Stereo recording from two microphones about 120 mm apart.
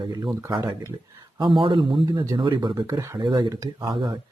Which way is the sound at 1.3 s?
45° right (ahead or behind).